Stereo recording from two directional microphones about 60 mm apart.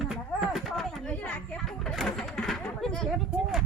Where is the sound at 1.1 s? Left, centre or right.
Left.